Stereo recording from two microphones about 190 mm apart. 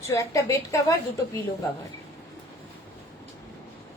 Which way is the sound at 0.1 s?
15° left (ahead or behind).